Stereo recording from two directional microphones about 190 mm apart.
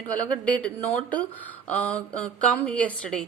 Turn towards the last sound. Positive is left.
turn(degrees=5)  # may be behind; listen again after turning